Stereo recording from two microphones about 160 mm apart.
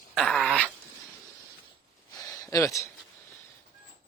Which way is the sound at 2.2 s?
20° left (ahead or behind).